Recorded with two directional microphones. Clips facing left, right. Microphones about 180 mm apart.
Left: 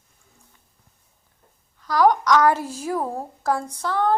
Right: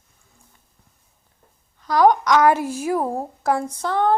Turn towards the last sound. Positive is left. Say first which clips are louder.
# right 2 dB
turn(degrees=-20)  # may be behind; listen again after turning